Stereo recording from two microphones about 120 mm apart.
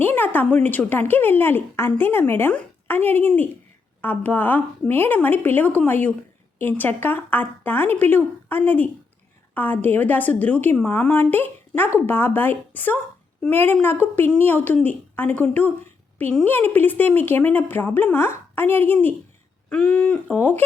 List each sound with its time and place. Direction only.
0.0 s speech: 15° left (ahead or behind)